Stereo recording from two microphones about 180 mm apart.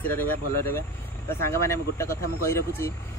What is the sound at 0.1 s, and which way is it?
Speech, 10° left (ahead or behind).